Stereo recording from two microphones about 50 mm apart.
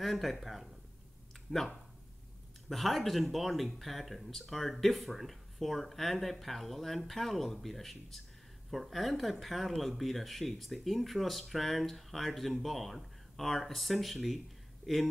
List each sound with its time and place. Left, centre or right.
0.0 s speech: centre
2.7 s speech: centre